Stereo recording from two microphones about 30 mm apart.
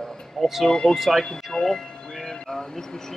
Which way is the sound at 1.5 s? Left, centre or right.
Centre.